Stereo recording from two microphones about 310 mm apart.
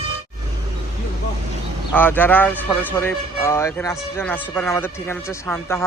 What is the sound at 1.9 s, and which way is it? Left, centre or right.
Speech, centre.